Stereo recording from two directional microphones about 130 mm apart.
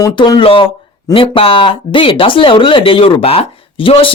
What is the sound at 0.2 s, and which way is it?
Speech, 40° left (ahead or behind).